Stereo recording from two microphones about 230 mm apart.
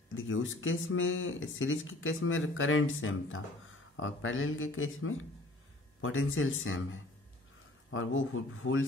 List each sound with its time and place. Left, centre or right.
0.1 s speech: left